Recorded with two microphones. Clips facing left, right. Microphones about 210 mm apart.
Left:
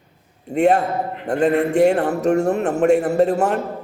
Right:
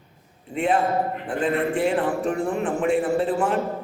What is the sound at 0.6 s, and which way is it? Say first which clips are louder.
A man's voice: left 5 dB; 45° left (ahead or behind).